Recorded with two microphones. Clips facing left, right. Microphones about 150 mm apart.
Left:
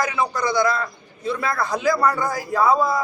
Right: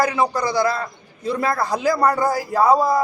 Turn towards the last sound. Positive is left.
turn(degrees=-35)  # may be behind; listen again after turning